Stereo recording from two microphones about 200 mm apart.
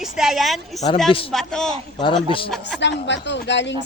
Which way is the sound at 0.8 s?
25° left (ahead or behind).